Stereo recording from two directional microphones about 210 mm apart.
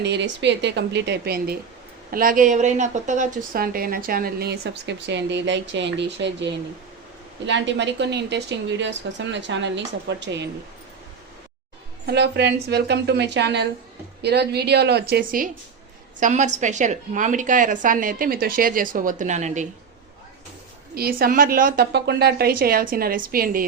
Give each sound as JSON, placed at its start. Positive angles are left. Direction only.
{"t": 0.0, "sound": "a woman's voice", "side_deg": -55}
{"t": 12.0, "sound": "a woman's voice", "side_deg": -55}
{"t": 20.9, "sound": "a woman's voice", "side_deg": -45}